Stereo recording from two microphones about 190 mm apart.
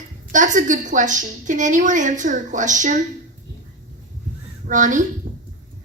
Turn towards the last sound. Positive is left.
turn(degrees=-45)  # may be behind; listen again after turning